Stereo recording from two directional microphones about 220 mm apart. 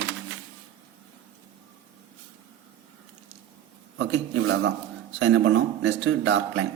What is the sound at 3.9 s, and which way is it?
Speech, 60° right (ahead or behind).